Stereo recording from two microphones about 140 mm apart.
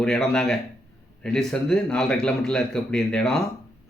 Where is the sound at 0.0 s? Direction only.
5° left (ahead or behind).